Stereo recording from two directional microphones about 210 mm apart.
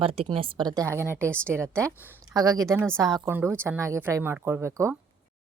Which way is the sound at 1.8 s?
10° right (ahead or behind).